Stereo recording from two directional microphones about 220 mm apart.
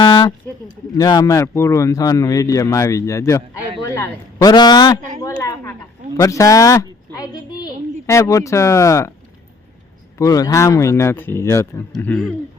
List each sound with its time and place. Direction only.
0.0 s a woman's voice: 20° left (ahead or behind)
10.2 s a woman's voice: 15° left (ahead or behind)